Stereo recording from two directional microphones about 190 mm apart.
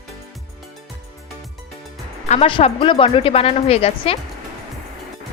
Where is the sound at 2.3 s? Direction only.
30° left (ahead or behind).